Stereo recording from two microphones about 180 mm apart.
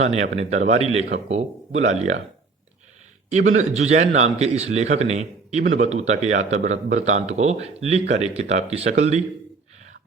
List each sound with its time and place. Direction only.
0.0 s speech: 40° right (ahead or behind)
3.2 s speech: 40° right (ahead or behind)